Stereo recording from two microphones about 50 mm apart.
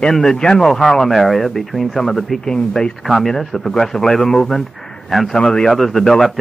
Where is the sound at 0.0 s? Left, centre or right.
Centre.